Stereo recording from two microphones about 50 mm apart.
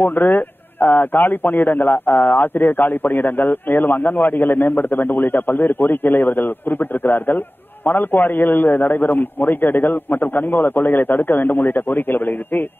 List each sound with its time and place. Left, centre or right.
0.0 s a man's voice: left